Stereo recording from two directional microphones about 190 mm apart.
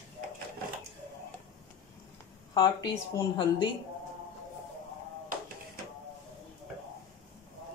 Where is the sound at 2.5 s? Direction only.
20° left (ahead or behind).